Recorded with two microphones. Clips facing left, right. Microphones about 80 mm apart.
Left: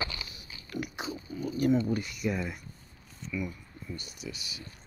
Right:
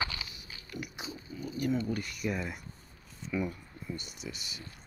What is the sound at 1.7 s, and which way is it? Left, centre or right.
Speech, centre.